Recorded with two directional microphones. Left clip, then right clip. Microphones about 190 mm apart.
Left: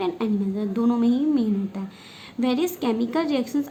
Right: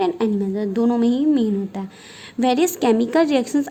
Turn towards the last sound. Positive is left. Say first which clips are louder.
# right 6 dB
turn(degrees=-50)  # may be behind; listen again after turning